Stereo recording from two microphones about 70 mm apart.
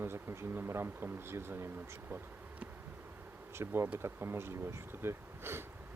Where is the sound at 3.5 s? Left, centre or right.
Right.